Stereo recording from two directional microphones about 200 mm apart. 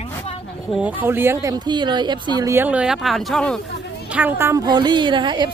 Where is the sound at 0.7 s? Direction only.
10° right (ahead or behind).